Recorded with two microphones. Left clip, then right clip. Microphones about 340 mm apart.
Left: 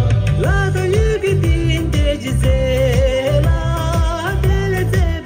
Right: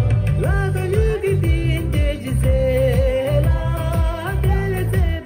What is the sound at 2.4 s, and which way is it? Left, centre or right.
Music, centre.